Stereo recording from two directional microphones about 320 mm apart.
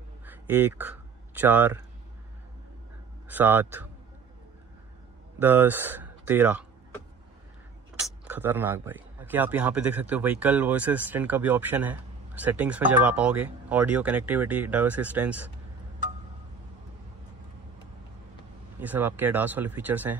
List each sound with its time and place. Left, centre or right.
0.2 s a sound: centre
1.4 s speech: centre
3.3 s speech: centre
5.4 s speech: centre
8.0 s speech: centre
18.8 s speech: centre